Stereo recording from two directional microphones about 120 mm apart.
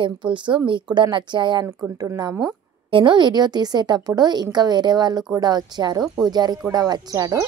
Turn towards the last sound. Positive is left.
turn(degrees=-30)  # may be behind; listen again after turning